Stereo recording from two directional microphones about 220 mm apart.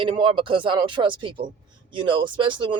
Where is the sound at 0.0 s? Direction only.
20° right (ahead or behind).